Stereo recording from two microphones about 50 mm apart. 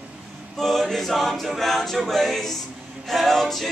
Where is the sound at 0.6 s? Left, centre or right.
Centre.